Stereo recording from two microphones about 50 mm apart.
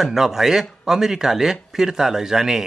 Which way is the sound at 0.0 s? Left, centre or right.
Centre.